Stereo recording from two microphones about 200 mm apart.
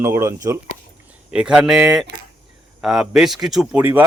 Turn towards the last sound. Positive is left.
turn(degrees=-10)  # may be behind; listen again after turning